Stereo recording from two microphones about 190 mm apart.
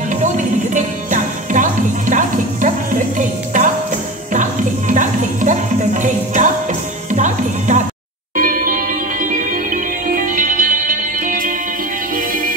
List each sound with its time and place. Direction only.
0.7 s music: 40° right (ahead or behind)